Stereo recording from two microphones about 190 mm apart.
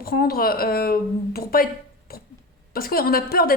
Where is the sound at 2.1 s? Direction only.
50° left (ahead or behind).